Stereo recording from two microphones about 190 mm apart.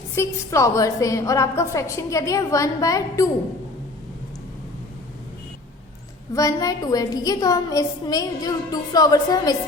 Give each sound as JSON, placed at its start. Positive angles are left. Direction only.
{"t": 0.2, "sound": "a woman's voice", "side_deg": 15}
{"t": 6.3, "sound": "a woman's voice", "side_deg": 15}